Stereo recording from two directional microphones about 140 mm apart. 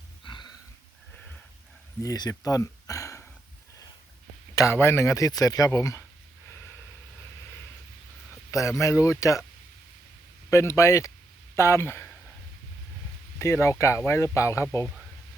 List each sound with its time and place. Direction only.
0.3 s a sound: 35° left (ahead or behind)
2.0 s speech: 25° left (ahead or behind)
4.5 s speech: 20° left (ahead or behind)
8.4 s speech: 20° left (ahead or behind)
10.5 s speech: 20° left (ahead or behind)
13.4 s speech: 20° left (ahead or behind)